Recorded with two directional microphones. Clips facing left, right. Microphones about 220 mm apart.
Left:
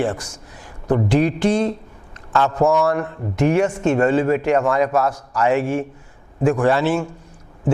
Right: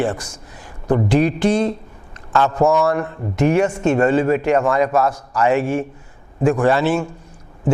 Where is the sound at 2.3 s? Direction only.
20° right (ahead or behind).